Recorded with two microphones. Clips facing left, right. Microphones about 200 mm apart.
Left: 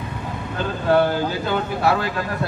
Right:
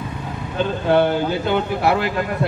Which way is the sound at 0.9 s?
20° right (ahead or behind).